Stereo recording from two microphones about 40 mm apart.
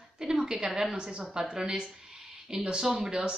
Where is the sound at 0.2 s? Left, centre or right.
Centre.